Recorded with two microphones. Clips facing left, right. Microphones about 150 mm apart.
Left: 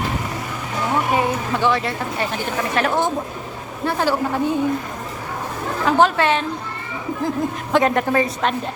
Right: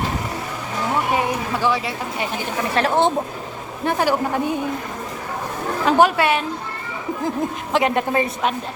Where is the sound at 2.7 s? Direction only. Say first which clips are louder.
Right 3 dB; 30° right (ahead or behind).